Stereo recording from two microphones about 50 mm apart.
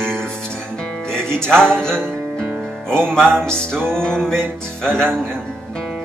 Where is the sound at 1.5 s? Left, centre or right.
Centre.